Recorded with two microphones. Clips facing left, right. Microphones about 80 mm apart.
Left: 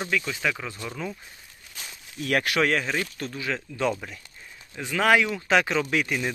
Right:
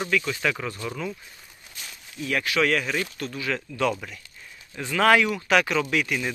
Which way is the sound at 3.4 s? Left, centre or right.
Centre.